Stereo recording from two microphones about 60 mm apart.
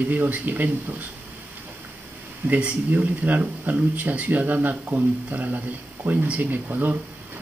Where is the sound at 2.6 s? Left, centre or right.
Right.